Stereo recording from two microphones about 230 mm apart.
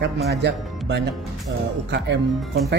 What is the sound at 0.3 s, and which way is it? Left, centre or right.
Speech, right.